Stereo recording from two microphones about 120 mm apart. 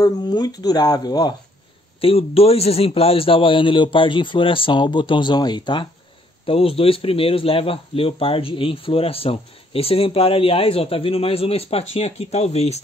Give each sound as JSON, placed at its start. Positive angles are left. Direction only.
{"t": 0.0, "sound": "speech", "side_deg": 35}
{"t": 2.0, "sound": "speech", "side_deg": 55}
{"t": 6.4, "sound": "speech", "side_deg": 50}